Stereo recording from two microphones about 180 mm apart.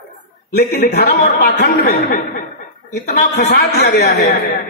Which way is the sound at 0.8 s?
65° left (ahead or behind).